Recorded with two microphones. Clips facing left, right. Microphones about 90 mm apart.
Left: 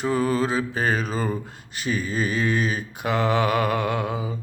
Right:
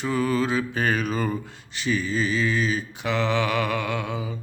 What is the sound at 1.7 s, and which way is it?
Mantra, 45° left (ahead or behind).